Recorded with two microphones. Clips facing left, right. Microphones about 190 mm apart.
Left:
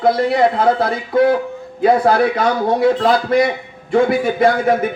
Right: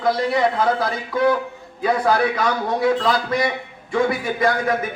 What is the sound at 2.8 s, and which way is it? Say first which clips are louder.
Speech: left 4 dB; 60° left (ahead or behind).